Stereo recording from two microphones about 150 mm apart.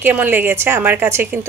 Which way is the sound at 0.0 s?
10° right (ahead or behind).